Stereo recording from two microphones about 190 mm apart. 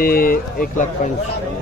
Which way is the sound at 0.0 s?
50° left (ahead or behind).